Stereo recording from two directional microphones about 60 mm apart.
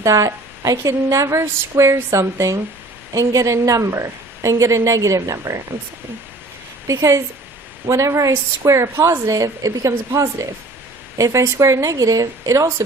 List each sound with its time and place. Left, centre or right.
0.0 s a woman's voice: right
3.1 s a woman's voice: right
6.8 s a woman's voice: right
11.9 s speech: right